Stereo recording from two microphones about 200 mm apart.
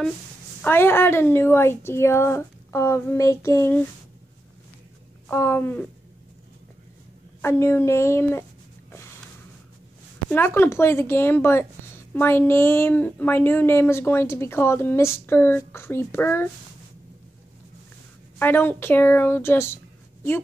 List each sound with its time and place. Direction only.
0.6 s speech: 10° left (ahead or behind)
5.3 s speech: 15° left (ahead or behind)
7.4 s speech: 15° left (ahead or behind)
10.3 s speech: 10° left (ahead or behind)
18.4 s speech: 10° left (ahead or behind)